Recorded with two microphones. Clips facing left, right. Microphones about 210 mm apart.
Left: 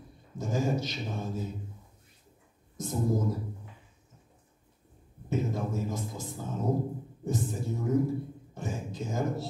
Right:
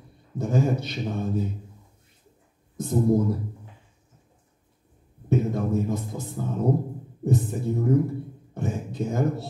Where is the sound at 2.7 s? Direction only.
60° right (ahead or behind).